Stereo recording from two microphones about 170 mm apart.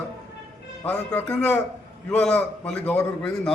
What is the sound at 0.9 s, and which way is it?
A man's voice, 10° left (ahead or behind).